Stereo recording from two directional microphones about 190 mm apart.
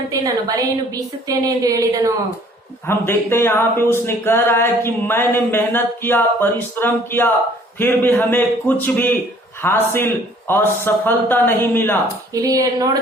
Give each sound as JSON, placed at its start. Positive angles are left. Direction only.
{"t": 0.1, "sound": "speech", "side_deg": -20}
{"t": 2.8, "sound": "speech", "side_deg": 10}
{"t": 9.6, "sound": "speech", "side_deg": 10}
{"t": 12.3, "sound": "speech", "side_deg": -20}